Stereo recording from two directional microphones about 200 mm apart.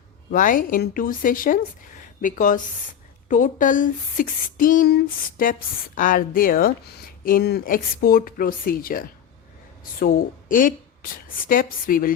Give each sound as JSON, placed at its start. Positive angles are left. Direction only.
{"t": 0.3, "sound": "a woman's voice", "side_deg": 40}
{"t": 10.5, "sound": "speech", "side_deg": 45}